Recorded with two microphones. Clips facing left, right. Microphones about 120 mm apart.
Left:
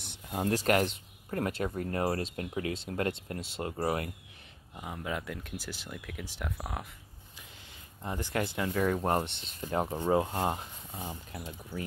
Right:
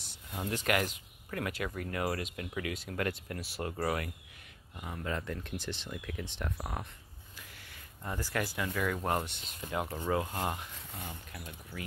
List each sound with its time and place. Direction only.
0.0 s speech: 60° left (ahead or behind); by 4.1 s 30° left (ahead or behind)
4.7 s speech: 15° left (ahead or behind)
8.0 s speech: 25° left (ahead or behind)